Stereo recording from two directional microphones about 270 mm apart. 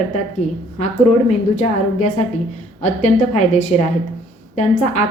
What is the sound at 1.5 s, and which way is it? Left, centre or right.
A woman's voice, left.